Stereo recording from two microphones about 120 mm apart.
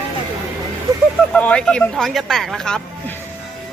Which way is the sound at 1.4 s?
10° left (ahead or behind).